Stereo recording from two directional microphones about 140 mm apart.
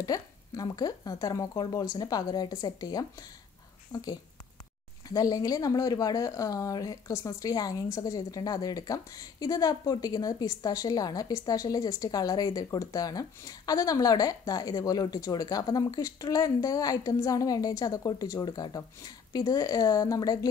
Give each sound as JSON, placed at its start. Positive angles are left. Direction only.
{"t": 0.0, "sound": "speech", "side_deg": 25}